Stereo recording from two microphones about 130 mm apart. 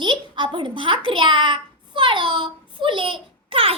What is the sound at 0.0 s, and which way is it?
A woman's voice, 40° right (ahead or behind).